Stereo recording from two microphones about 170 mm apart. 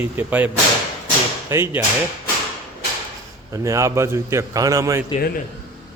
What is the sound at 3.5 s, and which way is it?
A man's voice, 20° right (ahead or behind).